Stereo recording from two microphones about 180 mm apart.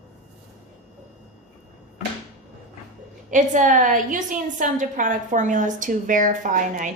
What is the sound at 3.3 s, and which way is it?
A woman's voice, 45° right (ahead or behind).